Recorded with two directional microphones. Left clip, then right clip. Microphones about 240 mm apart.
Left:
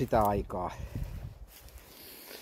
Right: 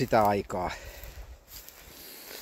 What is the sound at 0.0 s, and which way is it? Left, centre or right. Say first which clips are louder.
Speech: right 4 dB; centre.